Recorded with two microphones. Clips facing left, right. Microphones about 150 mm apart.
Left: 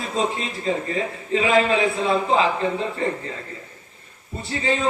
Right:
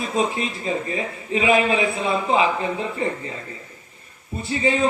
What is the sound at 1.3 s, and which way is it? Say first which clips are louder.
Speech: even; 15° right (ahead or behind).